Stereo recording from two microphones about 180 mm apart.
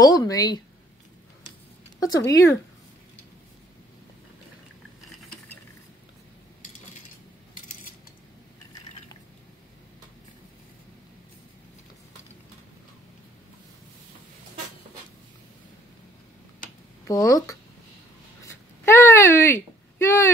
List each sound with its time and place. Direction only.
0.0 s speech: 20° left (ahead or behind)
2.0 s speech: 20° left (ahead or behind)
17.1 s speech: 20° left (ahead or behind)
18.4 s a sound: 15° left (ahead or behind)